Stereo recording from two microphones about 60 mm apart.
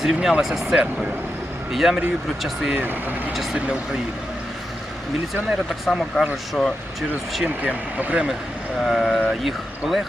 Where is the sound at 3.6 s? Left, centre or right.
Centre.